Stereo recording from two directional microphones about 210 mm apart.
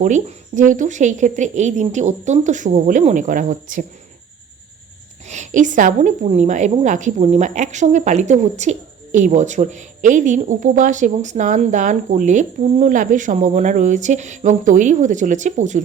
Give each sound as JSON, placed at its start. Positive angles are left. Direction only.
{"t": 0.0, "sound": "a woman's voice", "side_deg": -35}
{"t": 5.2, "sound": "a woman's voice", "side_deg": -35}